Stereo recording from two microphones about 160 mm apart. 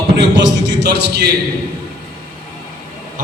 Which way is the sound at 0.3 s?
90° right.